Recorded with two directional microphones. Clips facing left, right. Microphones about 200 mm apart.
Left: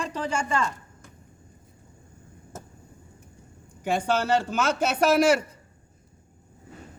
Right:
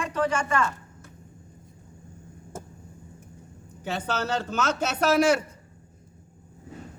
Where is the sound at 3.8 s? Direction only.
10° left (ahead or behind).